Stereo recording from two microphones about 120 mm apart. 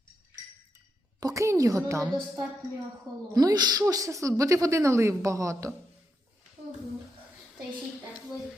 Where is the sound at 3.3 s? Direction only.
30° right (ahead or behind).